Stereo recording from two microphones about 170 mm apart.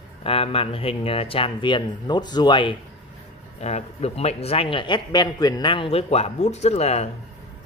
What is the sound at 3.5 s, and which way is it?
Speech, 40° left (ahead or behind).